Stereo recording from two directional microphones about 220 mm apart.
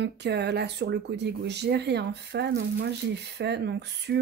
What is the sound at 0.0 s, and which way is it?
Speech, 50° right (ahead or behind).